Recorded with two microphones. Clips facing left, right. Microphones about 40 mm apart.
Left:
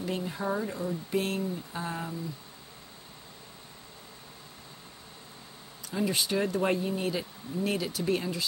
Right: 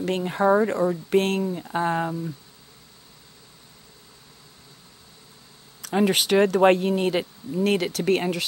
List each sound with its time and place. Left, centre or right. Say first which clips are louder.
0.0 s speech: right 10 dB; right
1.4 s speech: right 9 dB; right
5.8 s speech: right 8 dB; right